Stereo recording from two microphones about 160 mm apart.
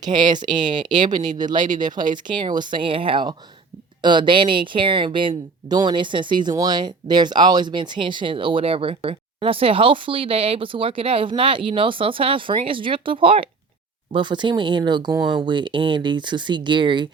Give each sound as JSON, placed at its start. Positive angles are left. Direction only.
{"t": 0.0, "sound": "speech", "side_deg": -30}